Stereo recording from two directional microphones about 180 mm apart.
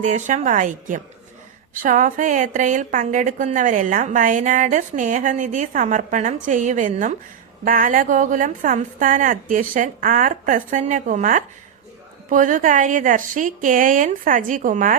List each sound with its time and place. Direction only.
0.0 s a woman's voice: 45° right (ahead or behind)